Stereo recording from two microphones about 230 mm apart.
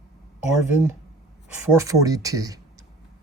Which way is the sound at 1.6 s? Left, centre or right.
Centre.